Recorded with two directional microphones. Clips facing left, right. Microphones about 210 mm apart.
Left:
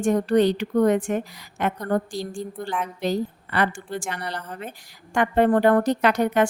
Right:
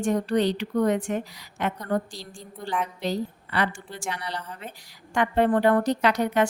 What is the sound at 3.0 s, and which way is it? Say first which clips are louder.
A woman's voice: left 3 dB; 50° left (ahead or behind).